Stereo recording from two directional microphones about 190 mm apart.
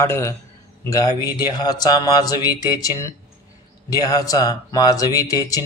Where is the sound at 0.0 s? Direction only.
15° left (ahead or behind).